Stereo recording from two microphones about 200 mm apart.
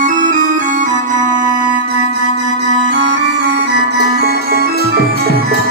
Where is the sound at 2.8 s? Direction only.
60° right (ahead or behind).